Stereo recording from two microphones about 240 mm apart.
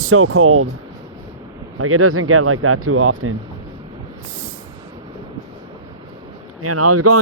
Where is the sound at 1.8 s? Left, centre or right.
Right.